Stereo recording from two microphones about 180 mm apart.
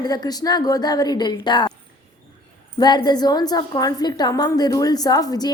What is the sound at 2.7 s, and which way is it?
A woman's voice, 25° left (ahead or behind).